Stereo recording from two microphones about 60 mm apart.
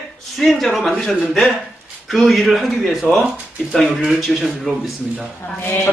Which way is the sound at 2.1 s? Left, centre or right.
Centre.